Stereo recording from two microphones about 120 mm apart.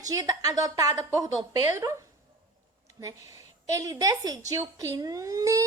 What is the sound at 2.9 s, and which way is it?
A woman's voice, 30° right (ahead or behind).